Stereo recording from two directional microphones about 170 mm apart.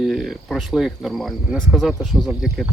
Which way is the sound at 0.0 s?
Centre (ahead or behind).